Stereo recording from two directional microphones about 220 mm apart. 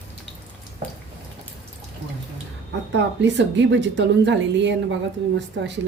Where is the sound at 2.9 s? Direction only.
55° right (ahead or behind).